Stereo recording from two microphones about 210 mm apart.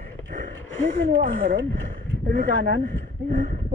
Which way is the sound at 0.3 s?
40° right (ahead or behind).